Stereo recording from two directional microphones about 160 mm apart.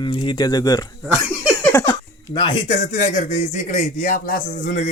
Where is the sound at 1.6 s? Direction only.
15° left (ahead or behind).